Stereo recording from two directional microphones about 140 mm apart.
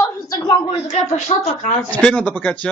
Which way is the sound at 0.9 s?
50° left (ahead or behind).